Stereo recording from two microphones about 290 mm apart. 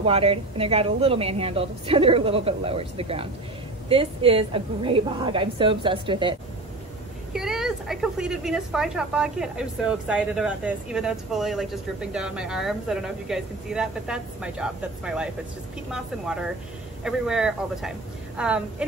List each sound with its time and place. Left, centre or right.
0.0 s a woman's voice: centre
7.3 s a woman's voice: centre